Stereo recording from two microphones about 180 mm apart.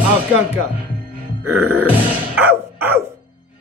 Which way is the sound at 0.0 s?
10° right (ahead or behind).